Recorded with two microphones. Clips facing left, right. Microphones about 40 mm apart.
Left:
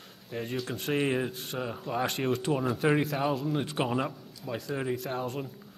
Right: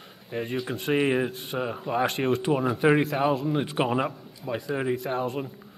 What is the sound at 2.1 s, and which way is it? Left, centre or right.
A man's voice, centre.